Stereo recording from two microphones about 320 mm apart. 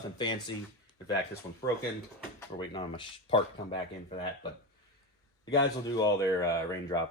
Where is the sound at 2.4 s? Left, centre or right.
Centre.